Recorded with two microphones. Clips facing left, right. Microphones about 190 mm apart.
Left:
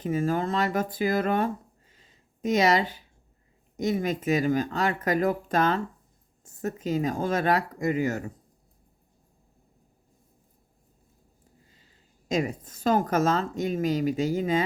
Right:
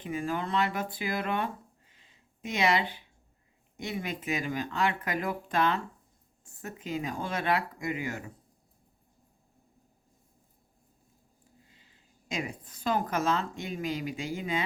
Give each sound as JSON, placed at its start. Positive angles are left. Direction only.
{"t": 0.0, "sound": "speech", "side_deg": 40}
{"t": 1.9, "sound": "a sound", "side_deg": 40}
{"t": 3.8, "sound": "speech", "side_deg": 40}
{"t": 12.3, "sound": "speech", "side_deg": 40}